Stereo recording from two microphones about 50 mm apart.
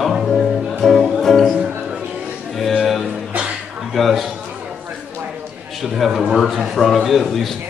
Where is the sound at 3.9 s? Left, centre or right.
Centre.